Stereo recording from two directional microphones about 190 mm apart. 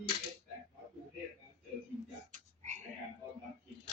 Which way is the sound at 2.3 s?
40° right (ahead or behind).